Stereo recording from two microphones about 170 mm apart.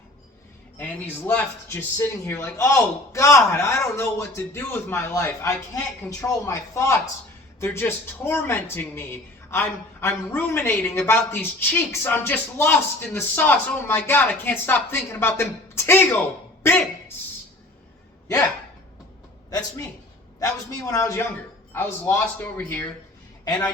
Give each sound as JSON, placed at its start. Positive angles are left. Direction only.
{"t": 0.8, "sound": "a man's voice", "side_deg": 10}
{"t": 19.5, "sound": "a man's voice", "side_deg": 20}